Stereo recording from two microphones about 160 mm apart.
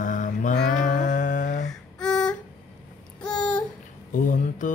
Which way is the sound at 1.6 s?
5° left (ahead or behind).